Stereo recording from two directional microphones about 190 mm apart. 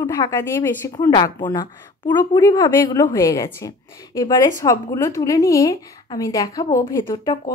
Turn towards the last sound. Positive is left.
turn(degrees=25)  # may be behind; listen again after turning